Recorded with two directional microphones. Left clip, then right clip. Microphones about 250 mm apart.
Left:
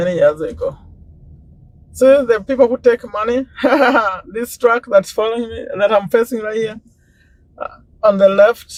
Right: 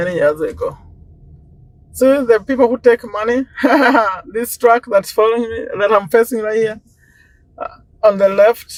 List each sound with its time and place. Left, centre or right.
0.0 s speech: right
2.1 s speech: right